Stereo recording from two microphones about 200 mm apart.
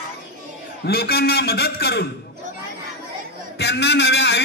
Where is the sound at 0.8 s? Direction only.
50° left (ahead or behind).